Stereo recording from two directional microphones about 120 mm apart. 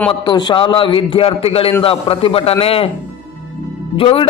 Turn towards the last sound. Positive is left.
turn(degrees=45)  # may be behind; listen again after turning